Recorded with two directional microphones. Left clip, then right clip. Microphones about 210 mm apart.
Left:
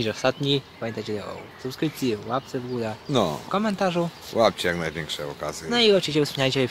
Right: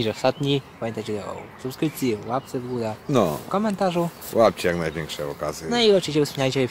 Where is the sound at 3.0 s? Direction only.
20° right (ahead or behind).